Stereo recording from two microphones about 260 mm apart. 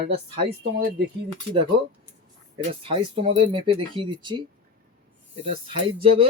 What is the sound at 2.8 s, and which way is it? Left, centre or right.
Speech, right.